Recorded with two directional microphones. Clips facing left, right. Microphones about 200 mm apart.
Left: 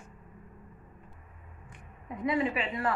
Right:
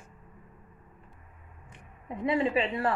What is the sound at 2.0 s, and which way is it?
Speech, 30° right (ahead or behind).